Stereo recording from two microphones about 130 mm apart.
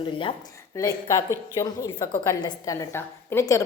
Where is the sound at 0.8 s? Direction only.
25° left (ahead or behind).